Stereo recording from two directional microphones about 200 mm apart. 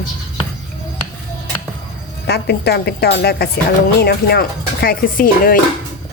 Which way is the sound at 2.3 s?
55° left (ahead or behind).